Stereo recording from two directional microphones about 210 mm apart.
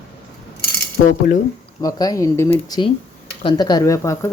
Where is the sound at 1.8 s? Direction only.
15° left (ahead or behind).